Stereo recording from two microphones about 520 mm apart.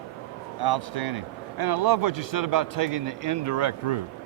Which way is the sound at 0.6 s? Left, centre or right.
Right.